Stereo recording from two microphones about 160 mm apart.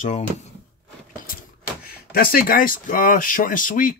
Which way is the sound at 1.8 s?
65° left (ahead or behind).